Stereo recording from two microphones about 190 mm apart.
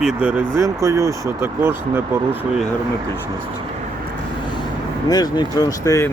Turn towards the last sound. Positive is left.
turn(degrees=15)  # may be behind; listen again after turning